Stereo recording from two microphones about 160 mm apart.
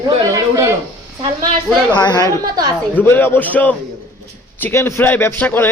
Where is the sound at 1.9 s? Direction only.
25° left (ahead or behind).